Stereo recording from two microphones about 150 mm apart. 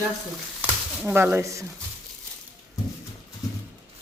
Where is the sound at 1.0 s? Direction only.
15° right (ahead or behind).